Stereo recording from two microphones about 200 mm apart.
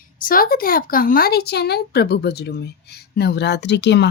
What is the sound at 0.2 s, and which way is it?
A woman's voice, 45° left (ahead or behind).